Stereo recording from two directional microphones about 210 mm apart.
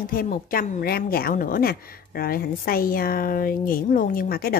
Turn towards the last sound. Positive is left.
turn(degrees=45)  # may be behind; listen again after turning